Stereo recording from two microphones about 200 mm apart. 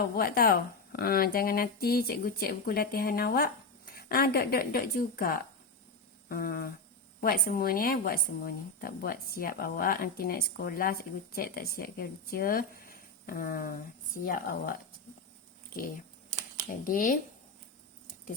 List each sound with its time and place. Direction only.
0.0 s a woman's voice: 50° left (ahead or behind)
16.8 s a woman's voice: 40° left (ahead or behind)